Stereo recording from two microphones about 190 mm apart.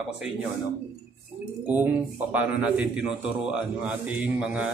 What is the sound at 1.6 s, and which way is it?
A man's voice, 10° right (ahead or behind).